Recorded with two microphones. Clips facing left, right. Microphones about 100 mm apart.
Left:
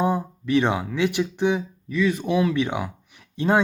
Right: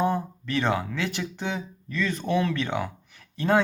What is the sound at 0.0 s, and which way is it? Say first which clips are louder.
Speech: left 2 dB; 15° left (ahead or behind).